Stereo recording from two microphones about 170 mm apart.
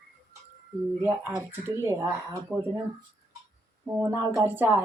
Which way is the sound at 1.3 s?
15° right (ahead or behind).